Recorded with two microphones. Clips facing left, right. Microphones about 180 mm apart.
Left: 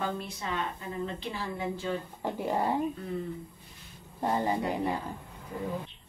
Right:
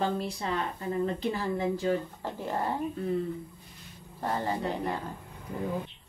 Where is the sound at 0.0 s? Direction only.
35° right (ahead or behind).